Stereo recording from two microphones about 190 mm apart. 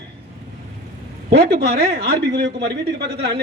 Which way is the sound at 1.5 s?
55° right (ahead or behind).